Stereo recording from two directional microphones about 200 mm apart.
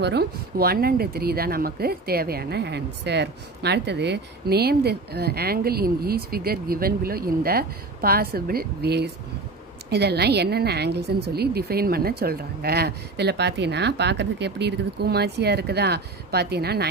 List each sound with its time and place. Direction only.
0.0 s speech: 55° right (ahead or behind)